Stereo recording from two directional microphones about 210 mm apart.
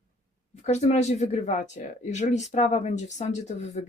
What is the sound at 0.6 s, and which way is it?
Speech, 30° left (ahead or behind).